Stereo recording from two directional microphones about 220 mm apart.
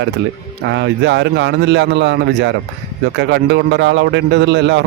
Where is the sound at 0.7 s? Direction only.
55° right (ahead or behind).